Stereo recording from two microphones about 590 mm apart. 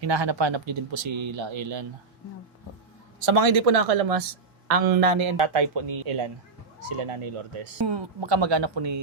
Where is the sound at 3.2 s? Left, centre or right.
Right.